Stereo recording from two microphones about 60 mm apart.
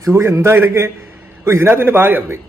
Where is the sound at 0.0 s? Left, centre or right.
Right.